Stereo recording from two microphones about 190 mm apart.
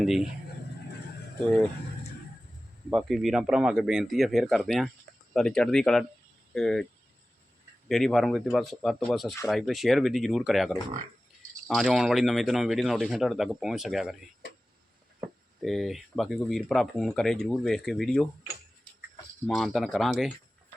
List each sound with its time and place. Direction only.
0.0 s speech: centre (ahead or behind)
2.9 s speech: centre (ahead or behind)
7.9 s speech: centre (ahead or behind)
15.6 s speech: centre (ahead or behind)
19.5 s speech: centre (ahead or behind)